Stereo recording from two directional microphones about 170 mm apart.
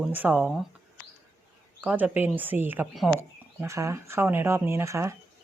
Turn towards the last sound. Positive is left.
turn(degrees=-15)  # may be behind; listen again after turning